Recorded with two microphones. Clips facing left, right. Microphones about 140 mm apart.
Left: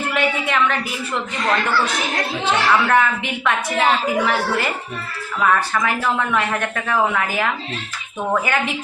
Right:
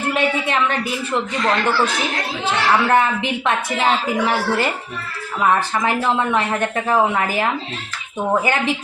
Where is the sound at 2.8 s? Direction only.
30° right (ahead or behind).